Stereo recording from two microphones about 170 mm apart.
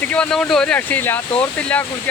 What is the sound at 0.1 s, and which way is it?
Speech, 5° left (ahead or behind).